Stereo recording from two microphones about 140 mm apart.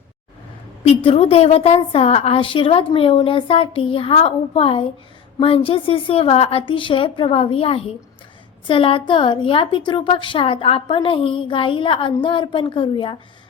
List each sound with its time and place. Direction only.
0.9 s a woman's voice: 45° left (ahead or behind)